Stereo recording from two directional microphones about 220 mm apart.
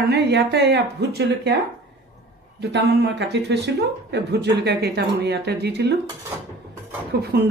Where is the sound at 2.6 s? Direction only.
50° right (ahead or behind).